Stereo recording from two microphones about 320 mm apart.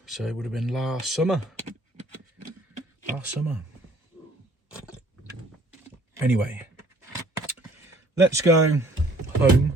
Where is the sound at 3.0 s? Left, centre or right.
Centre.